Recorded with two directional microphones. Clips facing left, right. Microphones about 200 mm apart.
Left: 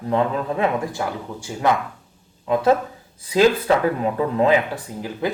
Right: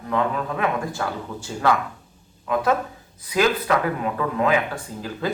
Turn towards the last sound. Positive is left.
turn(degrees=15)  # may be behind; listen again after turning